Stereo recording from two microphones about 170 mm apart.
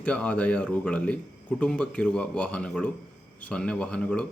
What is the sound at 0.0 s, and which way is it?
A man's voice, 5° left (ahead or behind).